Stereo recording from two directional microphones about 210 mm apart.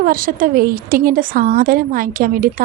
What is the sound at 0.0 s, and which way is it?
A woman's voice, 40° right (ahead or behind).